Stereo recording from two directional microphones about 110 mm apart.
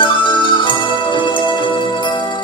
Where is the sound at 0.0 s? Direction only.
45° left (ahead or behind).